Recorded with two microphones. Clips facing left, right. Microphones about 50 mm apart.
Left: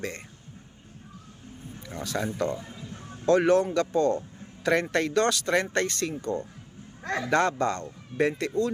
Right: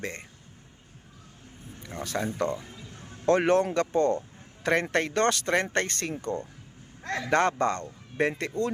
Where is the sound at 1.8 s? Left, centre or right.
Right.